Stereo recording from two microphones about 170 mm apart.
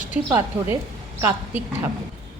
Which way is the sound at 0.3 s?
15° right (ahead or behind).